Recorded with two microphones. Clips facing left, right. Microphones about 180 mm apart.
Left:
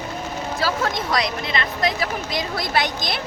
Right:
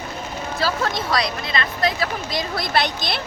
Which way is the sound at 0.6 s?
15° left (ahead or behind).